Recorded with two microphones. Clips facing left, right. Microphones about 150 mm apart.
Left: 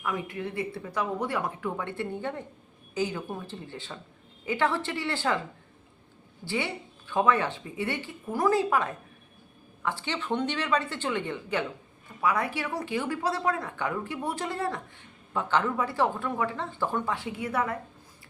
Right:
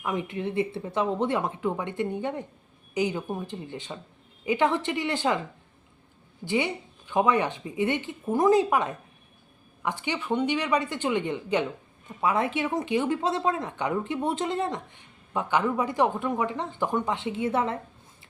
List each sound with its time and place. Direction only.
0.0 s speech: 20° right (ahead or behind)
6.4 s speech: 20° right (ahead or behind)